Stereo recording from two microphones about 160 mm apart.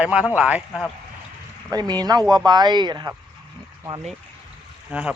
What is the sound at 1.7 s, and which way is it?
Speech, 25° right (ahead or behind).